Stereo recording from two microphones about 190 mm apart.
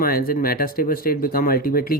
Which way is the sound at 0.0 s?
50° left (ahead or behind).